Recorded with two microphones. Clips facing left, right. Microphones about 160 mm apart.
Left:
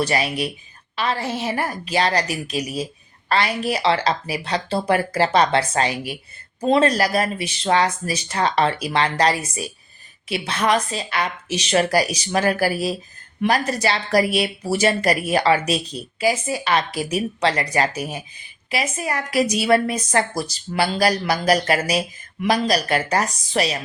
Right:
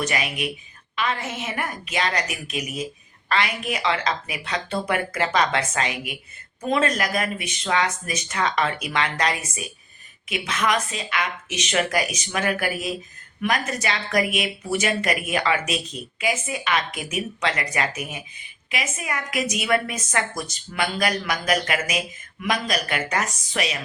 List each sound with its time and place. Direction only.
0.0 s a woman's voice: 35° left (ahead or behind)